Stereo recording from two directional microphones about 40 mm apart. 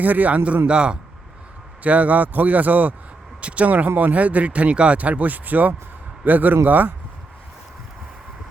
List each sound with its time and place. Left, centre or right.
0.0 s a man's voice: right
0.7 s a man's voice: right
1.8 s a man's voice: right
3.4 s a man's voice: right